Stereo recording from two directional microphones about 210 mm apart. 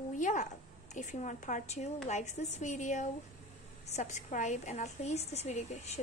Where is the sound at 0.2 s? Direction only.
35° left (ahead or behind).